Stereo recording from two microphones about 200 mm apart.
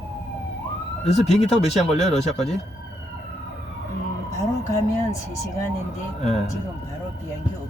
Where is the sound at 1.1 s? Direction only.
35° left (ahead or behind).